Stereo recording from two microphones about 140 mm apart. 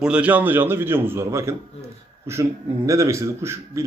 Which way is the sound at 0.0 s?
10° right (ahead or behind).